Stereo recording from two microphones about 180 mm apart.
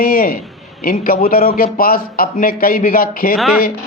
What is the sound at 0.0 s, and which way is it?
A man's voice, 55° left (ahead or behind).